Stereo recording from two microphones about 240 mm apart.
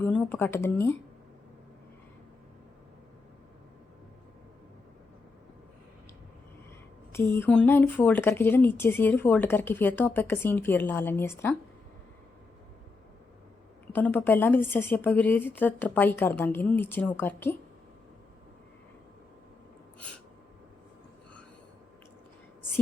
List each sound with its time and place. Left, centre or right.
0.0 s speech: centre
7.1 s speech: centre
13.9 s speech: centre